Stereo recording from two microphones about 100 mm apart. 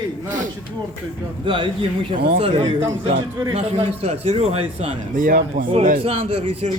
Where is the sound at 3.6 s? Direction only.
90° right.